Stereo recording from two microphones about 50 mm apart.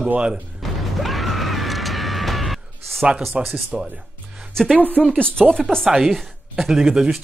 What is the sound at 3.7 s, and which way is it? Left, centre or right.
Speech, centre.